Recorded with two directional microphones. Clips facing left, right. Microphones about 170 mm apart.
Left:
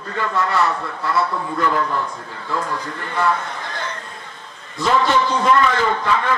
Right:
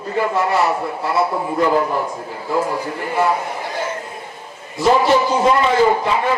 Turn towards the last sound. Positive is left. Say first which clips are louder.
# right 4 dB
turn(degrees=-20)  # may be behind; listen again after turning